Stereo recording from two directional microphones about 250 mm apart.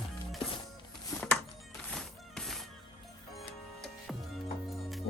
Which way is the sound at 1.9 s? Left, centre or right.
Centre.